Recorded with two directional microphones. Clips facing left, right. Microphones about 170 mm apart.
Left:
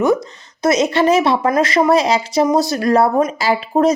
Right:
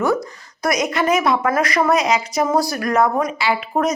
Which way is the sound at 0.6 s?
25° left (ahead or behind).